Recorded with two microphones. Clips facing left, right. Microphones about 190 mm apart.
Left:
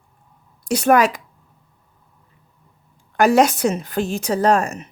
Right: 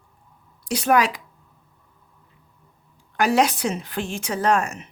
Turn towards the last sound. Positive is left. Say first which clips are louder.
# left 4 dB
turn(degrees=35)  # may be behind; listen again after turning